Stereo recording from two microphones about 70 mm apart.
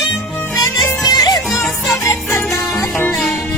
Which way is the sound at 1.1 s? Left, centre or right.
Left.